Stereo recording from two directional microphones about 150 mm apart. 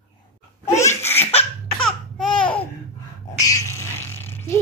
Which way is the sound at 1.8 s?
Centre (ahead or behind).